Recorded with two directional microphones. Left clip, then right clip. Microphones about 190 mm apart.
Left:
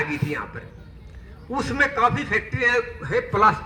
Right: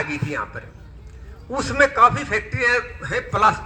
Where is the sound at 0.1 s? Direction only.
25° right (ahead or behind).